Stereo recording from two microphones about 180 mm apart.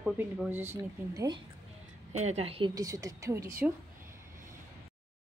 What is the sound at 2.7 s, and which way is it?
Speech, 20° right (ahead or behind).